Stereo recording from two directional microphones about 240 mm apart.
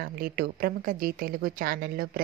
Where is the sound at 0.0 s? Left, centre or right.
Right.